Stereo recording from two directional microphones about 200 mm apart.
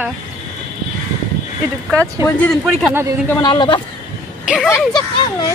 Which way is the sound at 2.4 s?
Centre (ahead or behind).